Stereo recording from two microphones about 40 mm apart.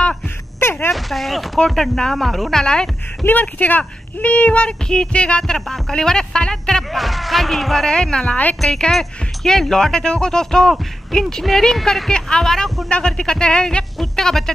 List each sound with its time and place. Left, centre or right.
0.6 s a sound: left
0.9 s speech: centre
1.8 s speech: centre
2.6 s speech: left
3.3 s speech: left
5.5 s speech: centre
6.9 s speech: centre
7.9 s speech: centre
14.1 s speech: centre